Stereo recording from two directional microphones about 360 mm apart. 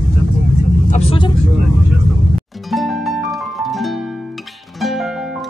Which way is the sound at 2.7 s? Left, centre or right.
Centre.